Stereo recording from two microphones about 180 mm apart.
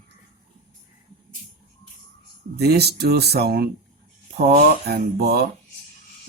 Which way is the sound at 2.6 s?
65° right (ahead or behind).